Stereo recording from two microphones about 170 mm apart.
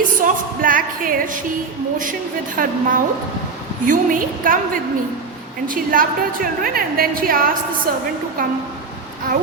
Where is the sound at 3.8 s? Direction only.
50° right (ahead or behind).